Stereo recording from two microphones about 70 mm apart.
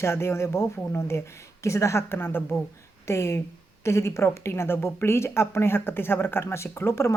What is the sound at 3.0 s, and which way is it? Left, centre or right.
Speech, left.